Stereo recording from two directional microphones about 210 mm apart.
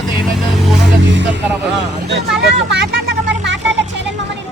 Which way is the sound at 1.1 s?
60° right (ahead or behind).